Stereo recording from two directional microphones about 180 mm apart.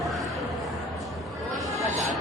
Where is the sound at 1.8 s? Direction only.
40° right (ahead or behind).